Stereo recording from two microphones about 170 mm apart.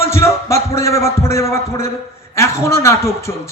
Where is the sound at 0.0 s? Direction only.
15° left (ahead or behind).